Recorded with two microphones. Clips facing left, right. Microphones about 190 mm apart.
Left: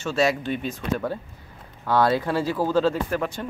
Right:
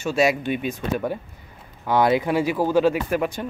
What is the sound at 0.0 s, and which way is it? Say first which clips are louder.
Speech: right 2 dB; 15° right (ahead or behind).